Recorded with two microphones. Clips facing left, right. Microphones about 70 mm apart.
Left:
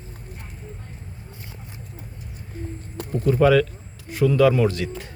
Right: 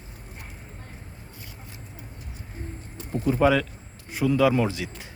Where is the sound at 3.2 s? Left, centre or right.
Centre.